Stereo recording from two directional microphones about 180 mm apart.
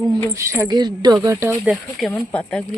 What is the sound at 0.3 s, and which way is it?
Speech, 15° right (ahead or behind).